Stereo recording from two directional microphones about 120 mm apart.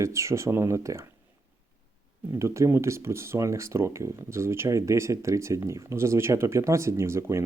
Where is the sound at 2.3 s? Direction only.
25° right (ahead or behind).